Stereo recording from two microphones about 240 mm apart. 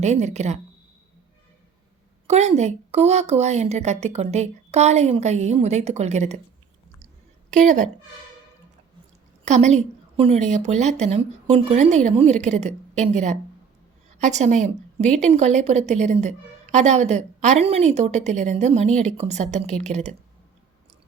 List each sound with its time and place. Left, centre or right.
0.0 s a woman's voice: right
2.2 s a woman's voice: right
7.5 s a woman's voice: right
9.4 s a woman's voice: right